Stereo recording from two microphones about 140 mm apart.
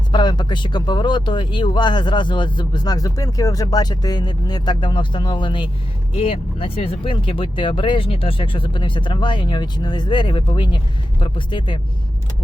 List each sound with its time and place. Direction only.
0.1 s speech: 30° left (ahead or behind)